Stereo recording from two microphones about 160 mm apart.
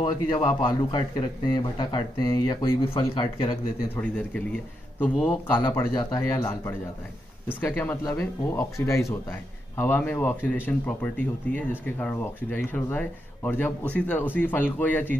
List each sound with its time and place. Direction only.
0.0 s a man's voice: 25° left (ahead or behind)
3.9 s speech: 10° left (ahead or behind)
5.5 s a man's voice: 25° left (ahead or behind)